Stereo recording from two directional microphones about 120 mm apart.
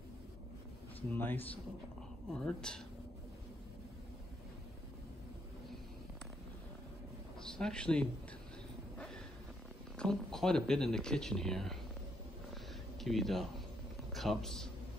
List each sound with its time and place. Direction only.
1.1 s speech: 15° left (ahead or behind)
2.2 s speech: 5° left (ahead or behind)
7.4 s a man's voice: 5° left (ahead or behind)
8.9 s a sound: 5° left (ahead or behind)
9.9 s speech: 5° left (ahead or behind)
13.0 s a man's voice: centre (ahead or behind)